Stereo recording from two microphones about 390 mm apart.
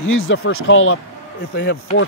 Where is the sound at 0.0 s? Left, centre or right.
Left.